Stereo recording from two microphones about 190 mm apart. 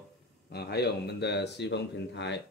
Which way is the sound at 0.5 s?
60° left (ahead or behind).